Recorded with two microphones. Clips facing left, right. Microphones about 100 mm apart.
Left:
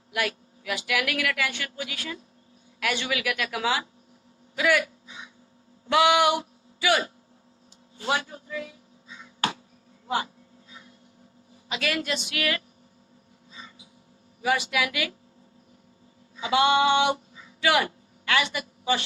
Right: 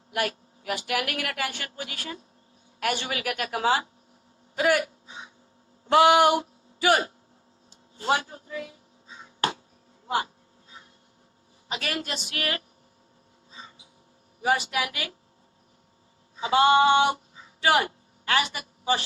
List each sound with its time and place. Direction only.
0.1 s speech: 40° right (ahead or behind)
7.9 s a sound: 35° right (ahead or behind)
11.7 s speech: 35° right (ahead or behind)
13.5 s a sound: 35° right (ahead or behind)
14.4 s speech: 35° right (ahead or behind)
16.4 s speech: 35° right (ahead or behind)